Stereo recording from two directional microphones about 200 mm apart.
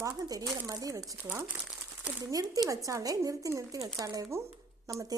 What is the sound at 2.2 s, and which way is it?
Speech, 20° right (ahead or behind).